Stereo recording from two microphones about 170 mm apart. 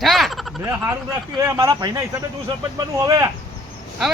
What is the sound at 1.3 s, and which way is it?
Speech, 15° right (ahead or behind).